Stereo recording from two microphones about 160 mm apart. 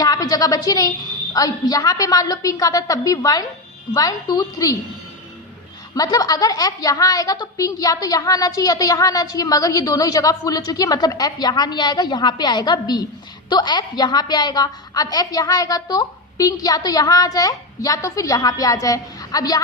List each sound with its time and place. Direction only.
0.0 s a woman's voice: 20° left (ahead or behind)
5.9 s a woman's voice: 25° left (ahead or behind)